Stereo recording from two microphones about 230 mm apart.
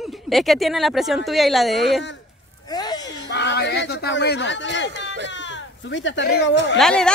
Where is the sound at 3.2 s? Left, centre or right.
Left.